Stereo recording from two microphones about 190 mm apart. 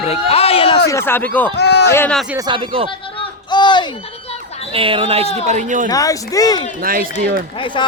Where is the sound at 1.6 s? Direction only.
60° left (ahead or behind).